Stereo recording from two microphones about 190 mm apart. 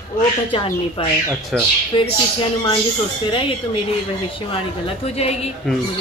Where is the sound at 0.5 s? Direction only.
25° left (ahead or behind).